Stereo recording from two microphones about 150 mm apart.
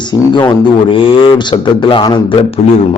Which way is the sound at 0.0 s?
30° left (ahead or behind).